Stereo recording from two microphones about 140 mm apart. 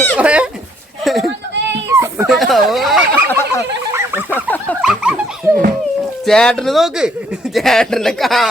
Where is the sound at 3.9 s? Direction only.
15° right (ahead or behind).